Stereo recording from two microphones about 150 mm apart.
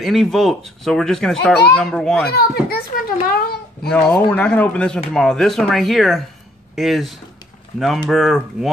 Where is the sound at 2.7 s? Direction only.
85° left.